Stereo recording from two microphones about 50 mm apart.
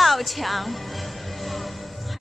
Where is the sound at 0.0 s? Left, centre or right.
Centre.